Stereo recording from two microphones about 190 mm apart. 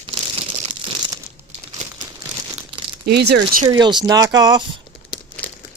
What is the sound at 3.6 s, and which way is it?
Speech, 25° right (ahead or behind).